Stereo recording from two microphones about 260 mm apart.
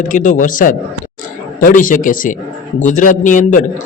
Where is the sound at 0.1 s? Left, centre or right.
Left.